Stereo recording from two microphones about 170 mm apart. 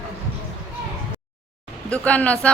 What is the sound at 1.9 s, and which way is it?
Speech, 10° left (ahead or behind).